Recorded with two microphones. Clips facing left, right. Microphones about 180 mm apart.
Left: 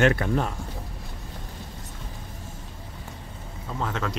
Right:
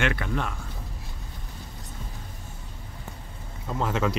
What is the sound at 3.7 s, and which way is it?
Speech, 5° right (ahead or behind).